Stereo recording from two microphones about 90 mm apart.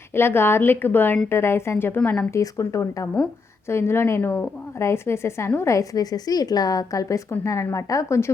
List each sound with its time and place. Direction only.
0.1 s a woman's voice: 25° left (ahead or behind)